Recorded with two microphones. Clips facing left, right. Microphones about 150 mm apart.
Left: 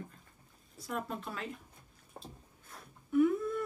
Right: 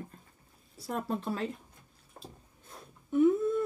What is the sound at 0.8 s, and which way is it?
Speech, 35° right (ahead or behind).